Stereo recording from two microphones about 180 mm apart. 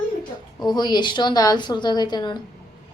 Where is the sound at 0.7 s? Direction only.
25° left (ahead or behind).